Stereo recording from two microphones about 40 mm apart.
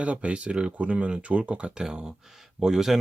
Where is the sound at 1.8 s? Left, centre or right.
Centre.